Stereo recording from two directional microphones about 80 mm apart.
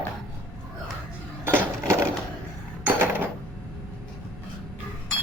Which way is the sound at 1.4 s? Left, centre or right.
Right.